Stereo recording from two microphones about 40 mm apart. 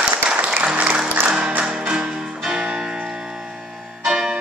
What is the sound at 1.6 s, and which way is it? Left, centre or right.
Music, centre.